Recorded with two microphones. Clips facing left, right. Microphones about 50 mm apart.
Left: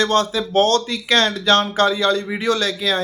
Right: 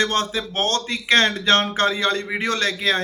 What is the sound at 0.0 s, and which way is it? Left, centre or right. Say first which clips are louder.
Speech: left 4 dB; right.